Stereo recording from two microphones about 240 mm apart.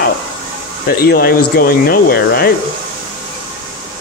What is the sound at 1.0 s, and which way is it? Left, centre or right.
Speech, left.